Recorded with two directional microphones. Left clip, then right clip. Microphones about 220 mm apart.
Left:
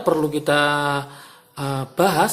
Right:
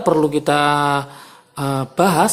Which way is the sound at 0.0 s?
20° right (ahead or behind).